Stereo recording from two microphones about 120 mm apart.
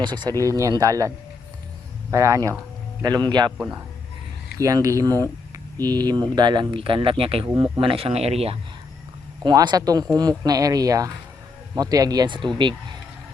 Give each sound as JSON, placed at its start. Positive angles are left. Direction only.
{"t": 0.0, "sound": "speech", "side_deg": -40}
{"t": 4.5, "sound": "speech", "side_deg": -30}
{"t": 9.4, "sound": "speech", "side_deg": -40}